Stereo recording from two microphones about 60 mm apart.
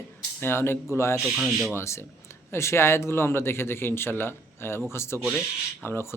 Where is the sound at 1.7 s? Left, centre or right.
Left.